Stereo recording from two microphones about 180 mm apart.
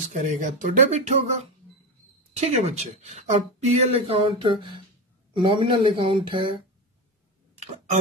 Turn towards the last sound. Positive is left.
turn(degrees=-35)  # may be behind; listen again after turning